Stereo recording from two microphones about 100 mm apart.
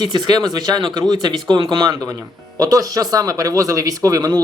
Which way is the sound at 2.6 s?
35° right (ahead or behind).